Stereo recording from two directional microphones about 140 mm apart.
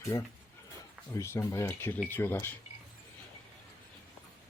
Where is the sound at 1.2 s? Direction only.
20° left (ahead or behind).